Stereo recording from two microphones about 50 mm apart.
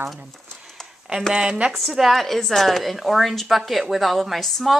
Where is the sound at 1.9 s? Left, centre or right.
Centre.